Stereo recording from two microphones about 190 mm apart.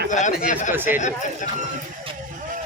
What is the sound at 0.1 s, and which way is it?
Speech, 40° left (ahead or behind).